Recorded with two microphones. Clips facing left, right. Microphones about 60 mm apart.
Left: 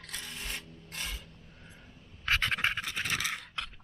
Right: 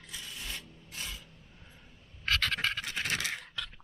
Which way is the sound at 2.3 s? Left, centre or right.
Left.